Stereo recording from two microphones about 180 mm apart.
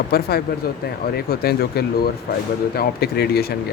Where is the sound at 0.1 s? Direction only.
60° left (ahead or behind).